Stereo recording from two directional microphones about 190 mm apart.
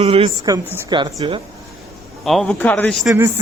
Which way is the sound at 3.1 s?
15° right (ahead or behind).